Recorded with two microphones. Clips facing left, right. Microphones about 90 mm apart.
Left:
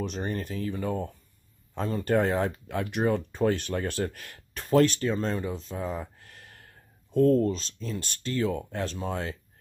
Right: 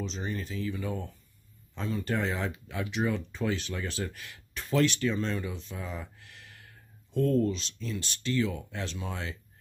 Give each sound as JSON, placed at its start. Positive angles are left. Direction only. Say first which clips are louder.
{"t": 0.0, "sound": "speech", "louder": "left 4 dB", "side_deg": 55}